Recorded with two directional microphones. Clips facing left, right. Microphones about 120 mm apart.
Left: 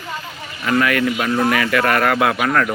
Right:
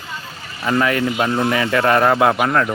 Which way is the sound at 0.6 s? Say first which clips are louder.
Even; 25° right (ahead or behind).